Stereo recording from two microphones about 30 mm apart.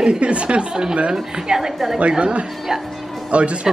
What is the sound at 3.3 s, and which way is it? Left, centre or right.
Speech, right.